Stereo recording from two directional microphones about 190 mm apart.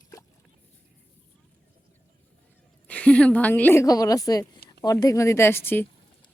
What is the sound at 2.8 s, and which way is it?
A woman's voice, 5° left (ahead or behind).